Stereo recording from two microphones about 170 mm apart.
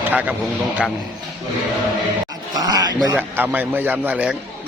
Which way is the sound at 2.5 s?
20° right (ahead or behind).